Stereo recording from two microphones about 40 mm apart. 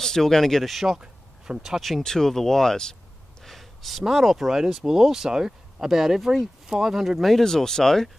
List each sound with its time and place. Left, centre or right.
0.0 s speech: centre
0.8 s a sound: centre
1.8 s speech: centre
3.4 s a sound: centre
4.0 s speech: centre
7.2 s speech: centre